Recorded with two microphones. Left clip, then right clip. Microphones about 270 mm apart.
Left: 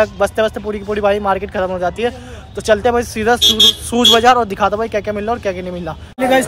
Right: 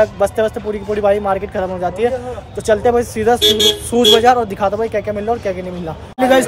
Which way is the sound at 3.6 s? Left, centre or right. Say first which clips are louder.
Left 2 dB; centre.